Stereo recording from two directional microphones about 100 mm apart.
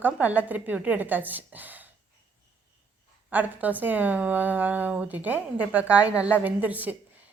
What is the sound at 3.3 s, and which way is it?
A woman's voice, 15° right (ahead or behind).